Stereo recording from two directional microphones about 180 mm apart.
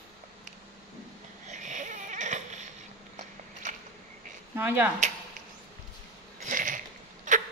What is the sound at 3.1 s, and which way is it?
Biting, 45° right (ahead or behind).